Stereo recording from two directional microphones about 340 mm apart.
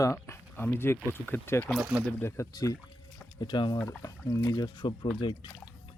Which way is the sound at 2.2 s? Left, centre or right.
Centre.